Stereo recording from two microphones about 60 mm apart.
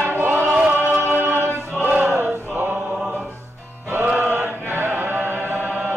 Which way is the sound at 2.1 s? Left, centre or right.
Right.